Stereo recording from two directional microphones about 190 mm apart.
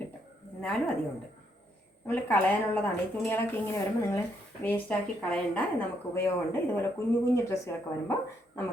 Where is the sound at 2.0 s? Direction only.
10° left (ahead or behind).